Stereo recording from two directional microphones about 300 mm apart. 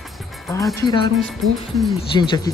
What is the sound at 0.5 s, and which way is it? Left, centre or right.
Speech, centre.